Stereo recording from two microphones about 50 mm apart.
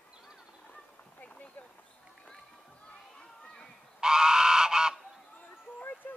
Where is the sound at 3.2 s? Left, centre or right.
Centre.